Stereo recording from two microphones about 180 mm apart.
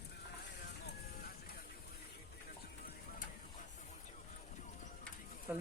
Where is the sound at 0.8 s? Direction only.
60° left (ahead or behind).